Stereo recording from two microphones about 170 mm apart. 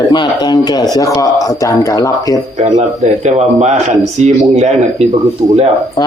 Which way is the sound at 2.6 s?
45° right (ahead or behind).